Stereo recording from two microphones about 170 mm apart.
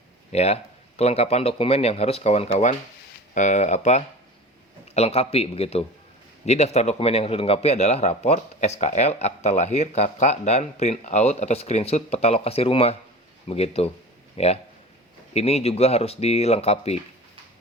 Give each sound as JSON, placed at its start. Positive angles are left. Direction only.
{"t": 0.3, "sound": "a man's voice", "side_deg": 40}